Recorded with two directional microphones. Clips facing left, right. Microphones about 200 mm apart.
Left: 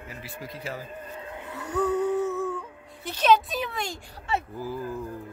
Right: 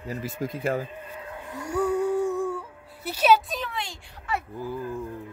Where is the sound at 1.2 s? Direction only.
20° left (ahead or behind).